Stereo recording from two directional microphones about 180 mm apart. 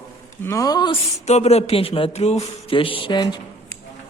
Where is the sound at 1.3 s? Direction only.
35° left (ahead or behind).